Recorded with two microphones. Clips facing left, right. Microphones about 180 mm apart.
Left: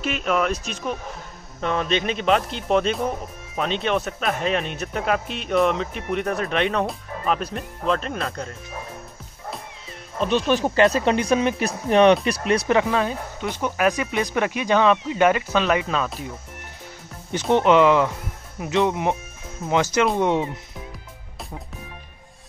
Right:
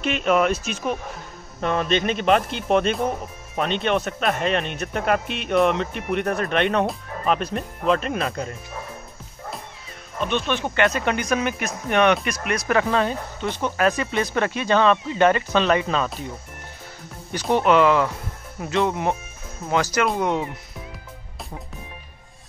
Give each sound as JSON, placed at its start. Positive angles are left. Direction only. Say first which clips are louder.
{"t": 0.0, "sound": "speech", "louder": "right 3 dB", "side_deg": 0}
{"t": 10.1, "sound": "speech", "louder": "left 4 dB", "side_deg": 35}
{"t": 12.7, "sound": "speech", "louder": "even", "side_deg": 10}
{"t": 17.6, "sound": "speech", "louder": "left 1 dB", "side_deg": 20}